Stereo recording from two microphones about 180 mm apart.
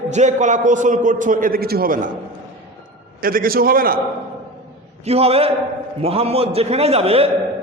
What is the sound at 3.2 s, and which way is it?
Speech, 55° right (ahead or behind).